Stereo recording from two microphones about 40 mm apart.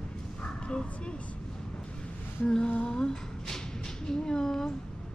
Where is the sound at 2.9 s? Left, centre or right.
Centre.